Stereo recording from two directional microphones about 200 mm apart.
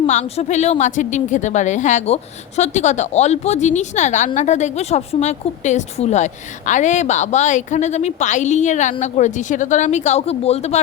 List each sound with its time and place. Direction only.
0.1 s a woman's voice: 35° left (ahead or behind)